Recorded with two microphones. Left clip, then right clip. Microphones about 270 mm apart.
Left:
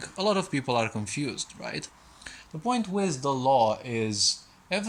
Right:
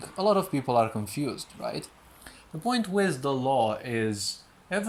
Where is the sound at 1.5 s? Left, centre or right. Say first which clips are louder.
Right 2 dB; centre.